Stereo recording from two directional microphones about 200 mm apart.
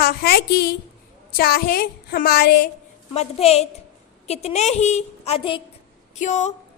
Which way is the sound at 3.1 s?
30° left (ahead or behind).